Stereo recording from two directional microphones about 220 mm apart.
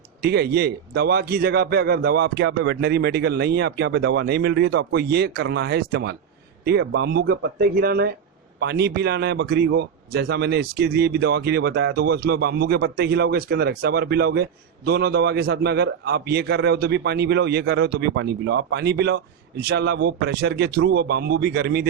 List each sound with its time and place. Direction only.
0.2 s a man's voice: 45° right (ahead or behind)